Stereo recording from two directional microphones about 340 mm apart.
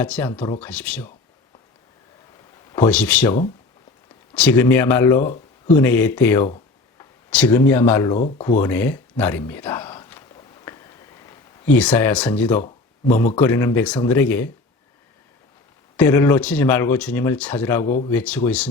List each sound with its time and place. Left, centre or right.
0.0 s speech: centre
2.7 s speech: centre
4.4 s speech: centre
8.1 s speech: centre
8.6 s speech: centre
12.6 s a sound: left
13.3 s speech: centre
16.0 s speech: centre